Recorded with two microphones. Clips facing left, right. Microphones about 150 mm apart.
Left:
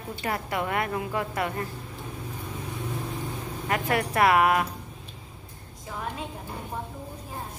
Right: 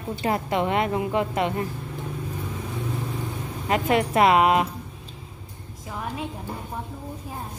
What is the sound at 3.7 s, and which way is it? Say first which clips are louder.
A woman's voice: right 5 dB; 20° right (ahead or behind).